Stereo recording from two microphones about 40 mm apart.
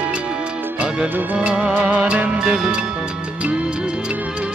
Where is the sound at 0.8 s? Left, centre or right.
Right.